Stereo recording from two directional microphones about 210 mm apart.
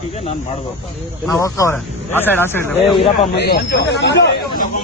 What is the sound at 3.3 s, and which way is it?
Speech, 50° left (ahead or behind).